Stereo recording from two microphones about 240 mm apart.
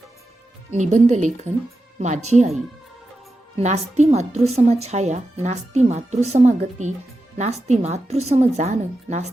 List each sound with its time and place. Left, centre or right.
0.7 s speech: right
3.6 s speech: right